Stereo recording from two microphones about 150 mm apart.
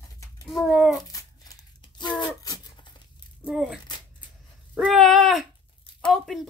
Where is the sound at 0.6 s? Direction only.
Centre (ahead or behind).